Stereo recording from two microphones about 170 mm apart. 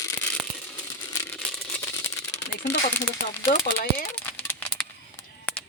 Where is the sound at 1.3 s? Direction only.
5° left (ahead or behind).